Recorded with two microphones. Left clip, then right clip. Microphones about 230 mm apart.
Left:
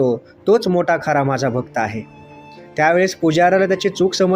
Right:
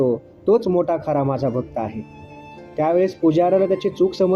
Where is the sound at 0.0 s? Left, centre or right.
Left.